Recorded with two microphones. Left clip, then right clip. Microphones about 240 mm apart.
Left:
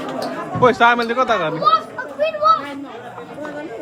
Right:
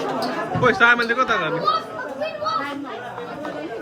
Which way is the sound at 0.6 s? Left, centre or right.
Centre.